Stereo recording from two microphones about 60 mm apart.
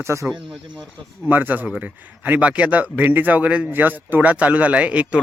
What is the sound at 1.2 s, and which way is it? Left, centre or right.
Speech, right.